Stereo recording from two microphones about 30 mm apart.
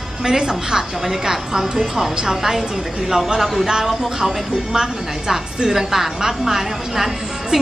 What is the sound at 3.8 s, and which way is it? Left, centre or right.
A woman's voice, centre.